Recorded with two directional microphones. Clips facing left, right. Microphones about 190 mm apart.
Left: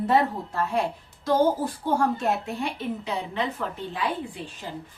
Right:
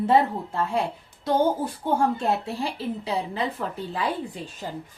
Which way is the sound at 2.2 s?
30° right (ahead or behind).